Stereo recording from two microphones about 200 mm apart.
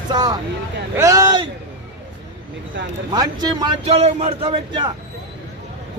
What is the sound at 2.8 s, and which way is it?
Speech, 65° right (ahead or behind).